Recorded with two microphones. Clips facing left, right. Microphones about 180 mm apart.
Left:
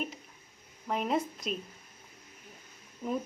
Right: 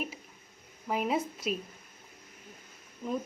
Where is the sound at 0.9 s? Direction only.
5° right (ahead or behind).